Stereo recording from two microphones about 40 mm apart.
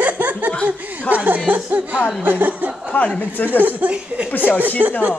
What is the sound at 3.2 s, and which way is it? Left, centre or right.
Speech, left.